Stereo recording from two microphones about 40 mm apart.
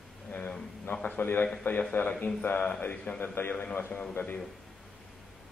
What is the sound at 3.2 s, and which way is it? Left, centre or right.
Speech, left.